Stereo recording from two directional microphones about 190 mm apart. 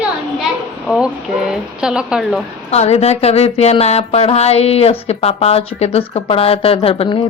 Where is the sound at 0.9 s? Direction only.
5° right (ahead or behind).